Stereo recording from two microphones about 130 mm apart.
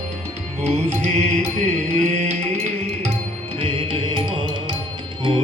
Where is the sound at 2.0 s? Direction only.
60° right (ahead or behind).